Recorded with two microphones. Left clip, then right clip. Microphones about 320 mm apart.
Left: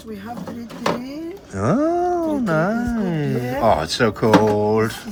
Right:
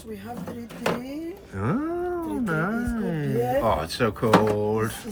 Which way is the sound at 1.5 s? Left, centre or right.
Centre.